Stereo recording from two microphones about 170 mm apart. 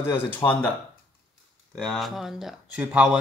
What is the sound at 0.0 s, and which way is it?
Speech, 15° left (ahead or behind).